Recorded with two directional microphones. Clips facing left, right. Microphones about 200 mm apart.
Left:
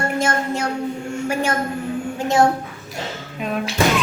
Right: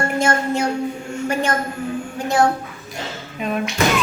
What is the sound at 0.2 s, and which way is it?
A woman's voice, centre (ahead or behind).